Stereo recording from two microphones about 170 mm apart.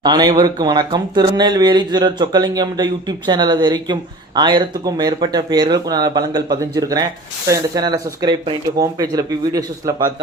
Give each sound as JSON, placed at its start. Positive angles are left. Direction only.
{"t": 0.0, "sound": "speech", "side_deg": -25}